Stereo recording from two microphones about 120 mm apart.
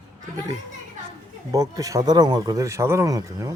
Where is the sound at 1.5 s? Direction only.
30° right (ahead or behind).